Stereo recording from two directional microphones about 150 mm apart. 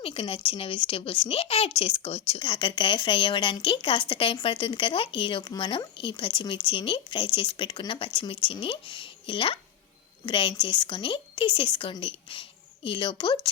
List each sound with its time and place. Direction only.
0.0 s speech: 40° left (ahead or behind)